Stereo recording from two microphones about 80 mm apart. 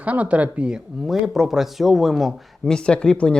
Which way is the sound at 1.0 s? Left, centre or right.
Centre.